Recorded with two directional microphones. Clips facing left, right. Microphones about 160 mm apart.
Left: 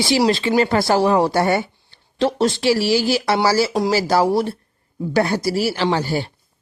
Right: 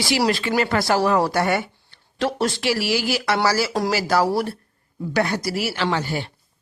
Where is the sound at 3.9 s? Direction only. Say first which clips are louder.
Left 3 dB; 30° left (ahead or behind).